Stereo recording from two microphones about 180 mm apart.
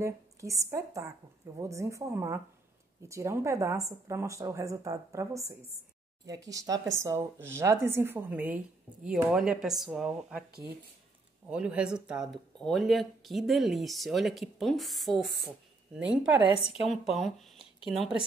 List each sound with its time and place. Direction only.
0.0 s a woman's voice: 15° right (ahead or behind)
11.4 s a woman's voice: 5° right (ahead or behind)
16.4 s a woman's voice: 30° left (ahead or behind)
16.8 s speech: centre (ahead or behind)